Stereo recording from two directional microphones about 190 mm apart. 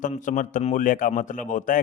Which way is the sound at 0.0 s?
40° left (ahead or behind).